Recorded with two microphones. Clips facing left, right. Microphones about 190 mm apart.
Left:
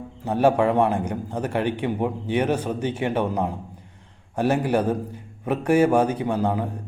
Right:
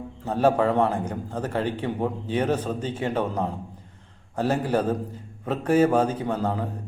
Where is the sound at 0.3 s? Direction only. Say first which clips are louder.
Left 2 dB; 15° left (ahead or behind).